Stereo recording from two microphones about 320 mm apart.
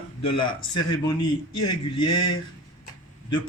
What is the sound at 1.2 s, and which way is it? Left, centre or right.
Speech, left.